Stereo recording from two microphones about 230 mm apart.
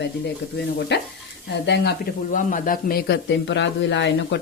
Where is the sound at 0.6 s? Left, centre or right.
Left.